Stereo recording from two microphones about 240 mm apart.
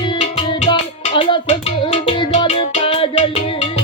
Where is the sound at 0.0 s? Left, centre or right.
Left.